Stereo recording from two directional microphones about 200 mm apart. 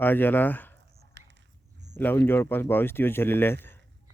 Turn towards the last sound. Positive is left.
turn(degrees=10)  # may be behind; listen again after turning